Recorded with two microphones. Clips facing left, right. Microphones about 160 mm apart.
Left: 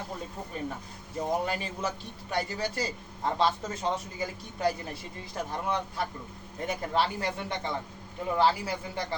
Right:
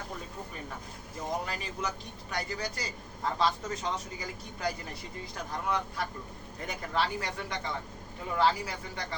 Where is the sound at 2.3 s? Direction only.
30° left (ahead or behind).